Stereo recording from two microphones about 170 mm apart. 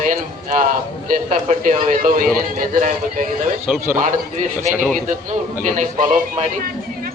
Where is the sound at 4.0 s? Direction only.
50° right (ahead or behind).